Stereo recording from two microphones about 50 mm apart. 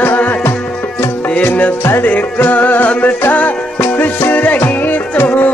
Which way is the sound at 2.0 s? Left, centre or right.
Left.